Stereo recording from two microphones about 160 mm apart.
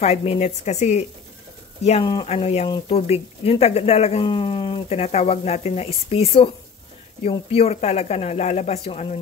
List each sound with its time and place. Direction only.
0.0 s speech: 40° left (ahead or behind)
2.2 s speech: 40° left (ahead or behind)